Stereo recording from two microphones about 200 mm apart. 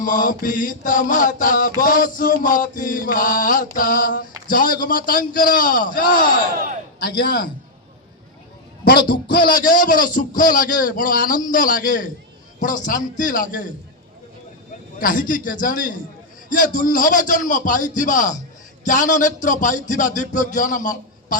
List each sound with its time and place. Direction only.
0.0 s mantra: 40° left (ahead or behind)
4.4 s a man's voice: 45° left (ahead or behind)
8.8 s a man's voice: 45° left (ahead or behind)
12.5 s mantra: 40° left (ahead or behind)
15.0 s a man's voice: 45° left (ahead or behind)
16.5 s mantra: 45° left (ahead or behind)